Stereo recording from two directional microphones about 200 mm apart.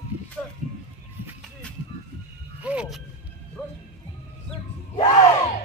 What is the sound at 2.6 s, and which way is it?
Speech, 5° right (ahead or behind).